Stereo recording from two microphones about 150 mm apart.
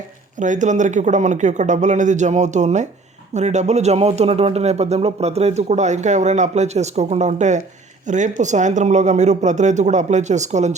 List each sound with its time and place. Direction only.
0.3 s speech: 55° right (ahead or behind)